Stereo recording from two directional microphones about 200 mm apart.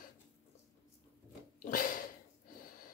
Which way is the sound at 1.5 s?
45° left (ahead or behind).